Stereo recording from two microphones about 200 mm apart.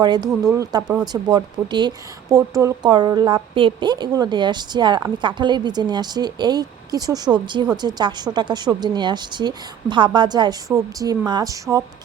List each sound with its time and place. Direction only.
0.0 s speech: 20° right (ahead or behind)